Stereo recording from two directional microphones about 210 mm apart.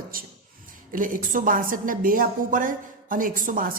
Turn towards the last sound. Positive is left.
turn(degrees=-40)  # may be behind; listen again after turning